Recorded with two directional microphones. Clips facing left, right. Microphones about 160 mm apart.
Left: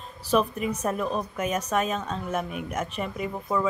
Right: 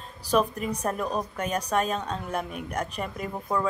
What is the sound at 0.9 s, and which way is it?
Speech, 5° left (ahead or behind).